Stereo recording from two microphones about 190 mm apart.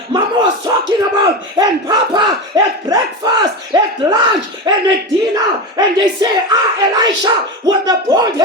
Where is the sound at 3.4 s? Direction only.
25° right (ahead or behind).